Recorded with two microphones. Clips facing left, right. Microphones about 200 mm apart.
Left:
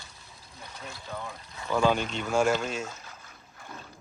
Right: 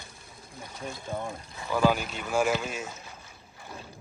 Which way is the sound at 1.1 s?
30° right (ahead or behind).